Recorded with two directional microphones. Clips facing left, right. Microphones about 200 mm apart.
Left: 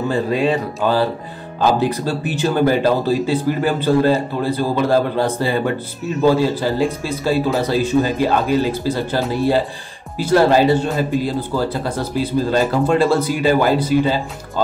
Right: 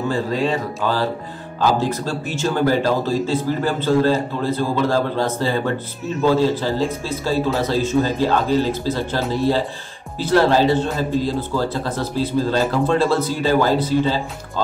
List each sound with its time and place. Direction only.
0.1 s speech: 15° left (ahead or behind)